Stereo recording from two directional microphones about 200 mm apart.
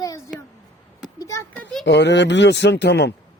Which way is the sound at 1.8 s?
60° left (ahead or behind).